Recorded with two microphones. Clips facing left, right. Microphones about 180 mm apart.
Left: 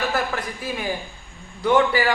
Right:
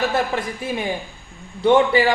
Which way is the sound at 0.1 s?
25° right (ahead or behind).